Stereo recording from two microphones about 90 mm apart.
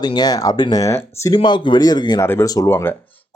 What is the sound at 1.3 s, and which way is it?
Speech, 60° left (ahead or behind).